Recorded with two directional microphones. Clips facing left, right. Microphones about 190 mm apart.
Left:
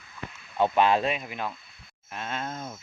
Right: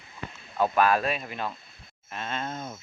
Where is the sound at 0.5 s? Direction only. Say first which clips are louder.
Left 1 dB; 25° left (ahead or behind).